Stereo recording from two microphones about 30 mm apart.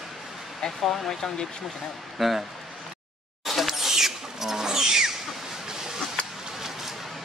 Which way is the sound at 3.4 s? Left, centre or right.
Centre.